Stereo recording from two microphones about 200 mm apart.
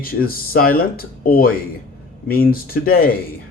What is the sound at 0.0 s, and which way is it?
Speech, 45° left (ahead or behind).